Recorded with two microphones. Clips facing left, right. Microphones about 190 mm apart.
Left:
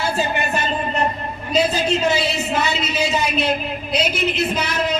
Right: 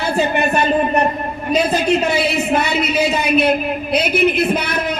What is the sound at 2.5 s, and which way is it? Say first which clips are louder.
A woman's voice: right 5 dB; 60° right (ahead or behind).